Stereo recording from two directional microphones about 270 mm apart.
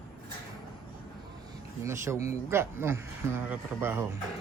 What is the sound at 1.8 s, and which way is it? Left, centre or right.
A man's voice, centre.